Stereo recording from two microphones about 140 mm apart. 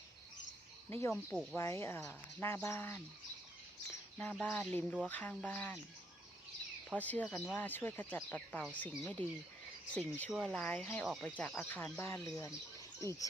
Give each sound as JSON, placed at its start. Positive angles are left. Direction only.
{"t": 0.9, "sound": "speech", "side_deg": 15}
{"t": 4.2, "sound": "speech", "side_deg": 10}
{"t": 6.9, "sound": "speech", "side_deg": 10}
{"t": 11.0, "sound": "speech", "side_deg": 0}
{"t": 11.3, "sound": "speech", "side_deg": 10}